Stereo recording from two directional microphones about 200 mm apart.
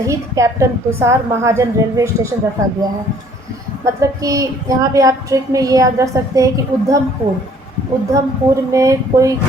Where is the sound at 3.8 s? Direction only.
15° right (ahead or behind).